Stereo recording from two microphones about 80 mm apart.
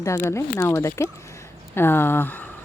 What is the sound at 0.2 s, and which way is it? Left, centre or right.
Speech, left.